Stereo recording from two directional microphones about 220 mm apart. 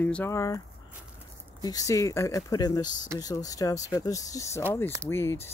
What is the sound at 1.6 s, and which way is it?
Speech, 15° left (ahead or behind).